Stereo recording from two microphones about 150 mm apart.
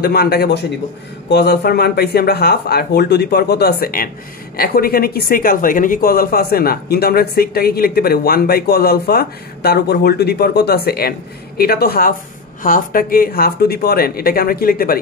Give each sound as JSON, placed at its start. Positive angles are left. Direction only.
{"t": 0.0, "sound": "speech", "side_deg": 90}
{"t": 12.6, "sound": "speech", "side_deg": 65}